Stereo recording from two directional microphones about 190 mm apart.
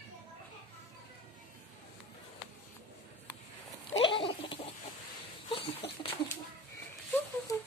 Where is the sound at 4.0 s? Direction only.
25° left (ahead or behind).